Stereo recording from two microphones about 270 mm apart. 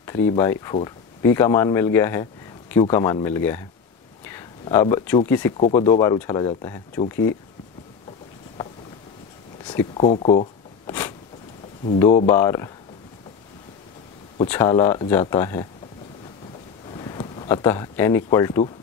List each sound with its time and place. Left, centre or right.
0.0 s speech: centre
4.2 s a sound: centre
5.6 s speech: centre
9.7 s a sound: centre
12.3 s speech: centre
14.5 s speech: centre
16.9 s speech: centre